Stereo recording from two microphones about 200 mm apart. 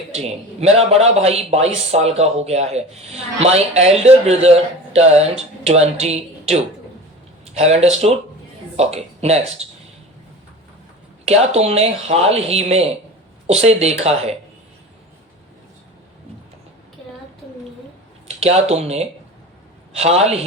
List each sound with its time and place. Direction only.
0.1 s a man's voice: 30° right (ahead or behind)
11.3 s a man's voice: 30° right (ahead or behind)
18.3 s a man's voice: 30° right (ahead or behind)